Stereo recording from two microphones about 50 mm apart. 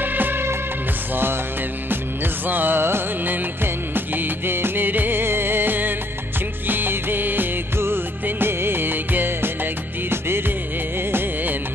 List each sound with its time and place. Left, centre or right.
0.0 s music: right
2.4 s music: right
6.7 s music of bollywood: right
10.0 s music: right